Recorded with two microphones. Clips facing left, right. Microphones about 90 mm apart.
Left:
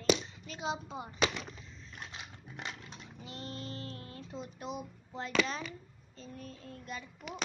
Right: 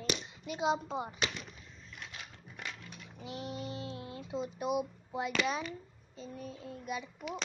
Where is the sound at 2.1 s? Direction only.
25° left (ahead or behind).